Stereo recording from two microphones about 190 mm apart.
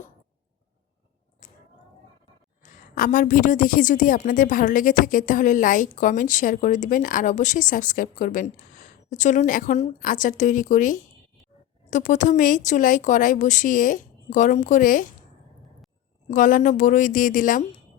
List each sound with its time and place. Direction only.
1.4 s a sound: 40° left (ahead or behind)
2.6 s a woman's voice: 45° left (ahead or behind)
16.3 s a woman's voice: 45° left (ahead or behind)